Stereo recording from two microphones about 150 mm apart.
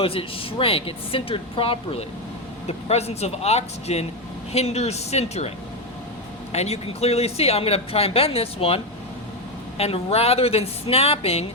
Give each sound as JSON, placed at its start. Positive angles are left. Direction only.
{"t": 0.0, "sound": "speech", "side_deg": 40}
{"t": 6.5, "sound": "speech", "side_deg": 45}